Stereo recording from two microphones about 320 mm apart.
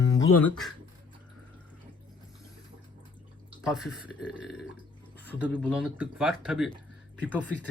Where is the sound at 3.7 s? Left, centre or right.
Centre.